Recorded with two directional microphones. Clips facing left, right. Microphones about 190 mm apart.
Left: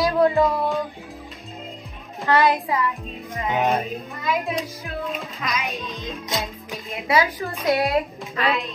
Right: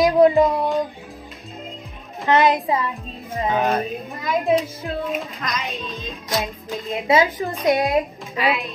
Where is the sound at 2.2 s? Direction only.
20° right (ahead or behind).